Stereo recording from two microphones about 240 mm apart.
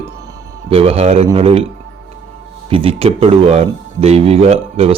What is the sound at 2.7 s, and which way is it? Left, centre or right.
Speech, right.